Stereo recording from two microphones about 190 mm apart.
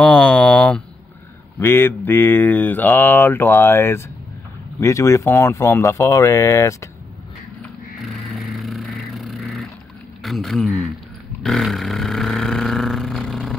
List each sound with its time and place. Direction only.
0.0 s speech: 5° left (ahead or behind)
8.3 s vehicle: centre (ahead or behind)
10.2 s a man's voice: centre (ahead or behind)
11.4 s a sound: centre (ahead or behind)